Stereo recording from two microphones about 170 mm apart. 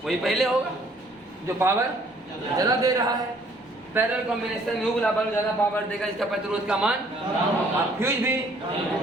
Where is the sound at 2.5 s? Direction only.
20° right (ahead or behind).